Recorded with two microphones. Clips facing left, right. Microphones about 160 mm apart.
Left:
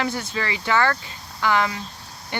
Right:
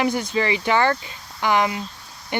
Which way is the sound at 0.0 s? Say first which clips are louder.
Right 5 dB; 15° right (ahead or behind).